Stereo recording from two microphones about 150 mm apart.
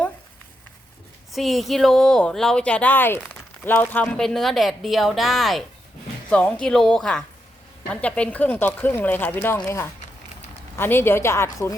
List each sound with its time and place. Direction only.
1.3 s speech: centre (ahead or behind); by 11.8 s 20° left (ahead or behind)